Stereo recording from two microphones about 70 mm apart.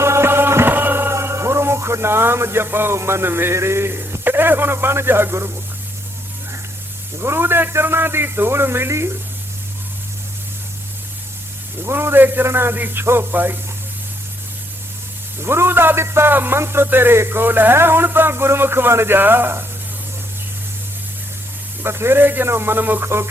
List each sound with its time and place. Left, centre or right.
0.0 s music: right
7.2 s a man's voice: right
11.8 s a man's voice: right
15.4 s a man's voice: right
21.8 s a man's voice: right